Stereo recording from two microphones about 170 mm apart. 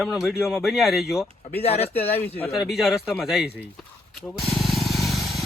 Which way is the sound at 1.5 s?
35° left (ahead or behind).